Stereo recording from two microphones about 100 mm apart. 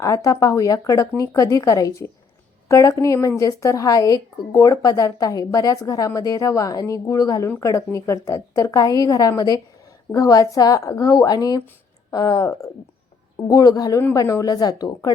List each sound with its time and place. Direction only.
0.0 s a woman's voice: 35° left (ahead or behind)